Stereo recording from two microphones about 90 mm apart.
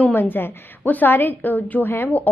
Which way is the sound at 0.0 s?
20° left (ahead or behind).